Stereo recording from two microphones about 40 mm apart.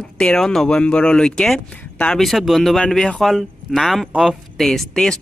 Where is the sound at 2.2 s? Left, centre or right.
Centre.